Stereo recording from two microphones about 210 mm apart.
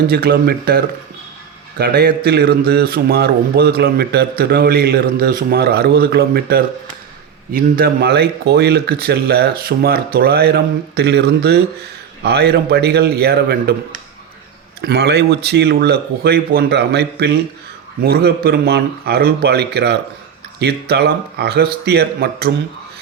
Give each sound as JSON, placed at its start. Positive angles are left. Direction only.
{"t": 0.1, "sound": "speech", "side_deg": -45}
{"t": 1.8, "sound": "speech", "side_deg": -45}